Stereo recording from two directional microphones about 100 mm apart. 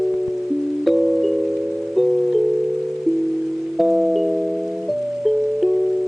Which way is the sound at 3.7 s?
Centre (ahead or behind).